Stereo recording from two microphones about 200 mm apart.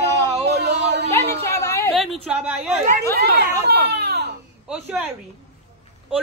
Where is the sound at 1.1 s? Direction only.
15° left (ahead or behind).